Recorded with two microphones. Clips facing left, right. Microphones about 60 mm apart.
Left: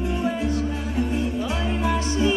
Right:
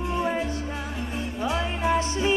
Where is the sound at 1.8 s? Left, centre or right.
Right.